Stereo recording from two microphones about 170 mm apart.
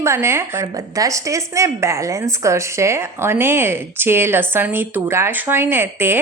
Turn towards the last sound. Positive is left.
turn(degrees=-15)  # may be behind; listen again after turning